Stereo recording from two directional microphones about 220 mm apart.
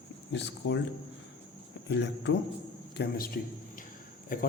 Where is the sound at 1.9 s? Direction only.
50° left (ahead or behind).